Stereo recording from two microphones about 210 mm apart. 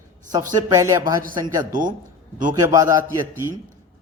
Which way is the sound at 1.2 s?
40° right (ahead or behind).